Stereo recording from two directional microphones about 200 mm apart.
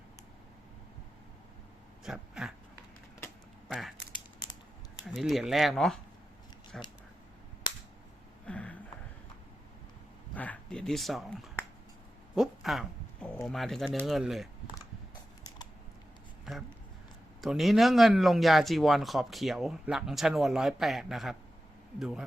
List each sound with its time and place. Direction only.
2.0 s speech: 5° right (ahead or behind)
3.7 s speech: centre (ahead or behind)
4.1 s crushing: 20° left (ahead or behind)
5.0 s speech: centre (ahead or behind)
8.4 s a sound: 5° left (ahead or behind)
10.3 s speech: 5° left (ahead or behind)
16.5 s a sound: centre (ahead or behind)
17.4 s speech: centre (ahead or behind)